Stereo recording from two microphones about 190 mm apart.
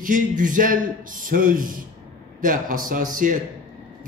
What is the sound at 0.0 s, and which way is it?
A man's voice, 45° right (ahead or behind).